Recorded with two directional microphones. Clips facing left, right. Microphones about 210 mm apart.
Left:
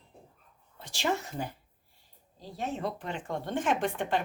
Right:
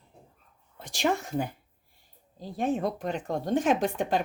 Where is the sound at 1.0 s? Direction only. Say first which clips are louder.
Right 4 dB; 50° right (ahead or behind).